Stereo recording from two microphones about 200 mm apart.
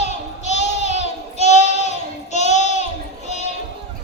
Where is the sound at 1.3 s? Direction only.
35° left (ahead or behind).